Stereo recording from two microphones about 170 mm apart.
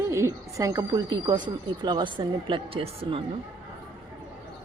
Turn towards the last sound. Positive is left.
turn(degrees=-30)  # may be behind; listen again after turning